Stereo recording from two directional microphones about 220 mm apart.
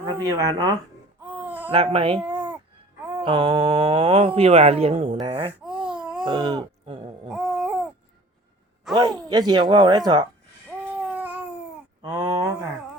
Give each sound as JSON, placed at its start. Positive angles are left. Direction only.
{"t": 0.0, "sound": "speech", "side_deg": -20}
{"t": 1.3, "sound": "a sound", "side_deg": -10}
{"t": 1.7, "sound": "speech", "side_deg": -25}
{"t": 2.2, "sound": "babbling", "side_deg": -5}
{"t": 3.2, "sound": "speech", "side_deg": -25}
{"t": 5.8, "sound": "baby cry", "side_deg": -5}
{"t": 6.2, "sound": "speech", "side_deg": -20}
{"t": 7.3, "sound": "babbling", "side_deg": 0}
{"t": 9.0, "sound": "speech", "side_deg": -20}
{"t": 11.1, "sound": "babbling", "side_deg": -5}
{"t": 12.0, "sound": "a sound", "side_deg": -15}